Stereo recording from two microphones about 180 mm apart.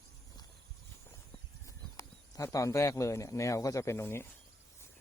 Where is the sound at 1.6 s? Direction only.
15° left (ahead or behind).